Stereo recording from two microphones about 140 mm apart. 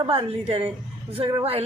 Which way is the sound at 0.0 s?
40° right (ahead or behind).